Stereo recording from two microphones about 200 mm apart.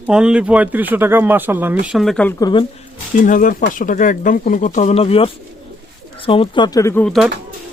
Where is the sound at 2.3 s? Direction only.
20° left (ahead or behind).